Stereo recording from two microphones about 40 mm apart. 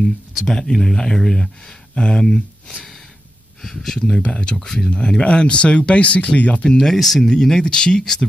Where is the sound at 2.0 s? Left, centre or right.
Left.